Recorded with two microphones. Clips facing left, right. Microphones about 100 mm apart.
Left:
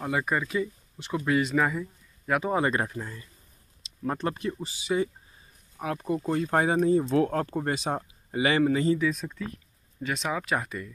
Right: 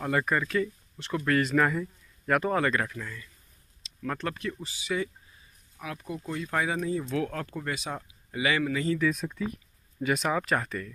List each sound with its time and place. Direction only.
0.0 s speech: 10° left (ahead or behind)
2.5 s speech: 25° left (ahead or behind)
5.8 s speech: 40° left (ahead or behind)
9.0 s speech: 5° right (ahead or behind)